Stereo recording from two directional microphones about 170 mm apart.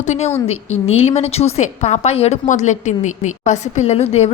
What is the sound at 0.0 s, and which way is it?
A woman's voice, 45° left (ahead or behind).